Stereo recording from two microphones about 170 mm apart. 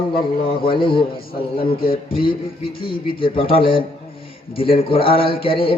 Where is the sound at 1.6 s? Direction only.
60° left (ahead or behind).